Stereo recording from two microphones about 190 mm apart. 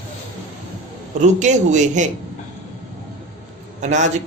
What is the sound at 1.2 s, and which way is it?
Speech, 40° right (ahead or behind).